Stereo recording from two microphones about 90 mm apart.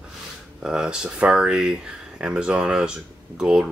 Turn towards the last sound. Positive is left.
turn(degrees=-10)  # may be behind; listen again after turning